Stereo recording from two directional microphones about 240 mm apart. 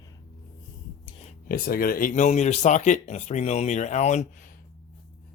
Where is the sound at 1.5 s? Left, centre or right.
Left.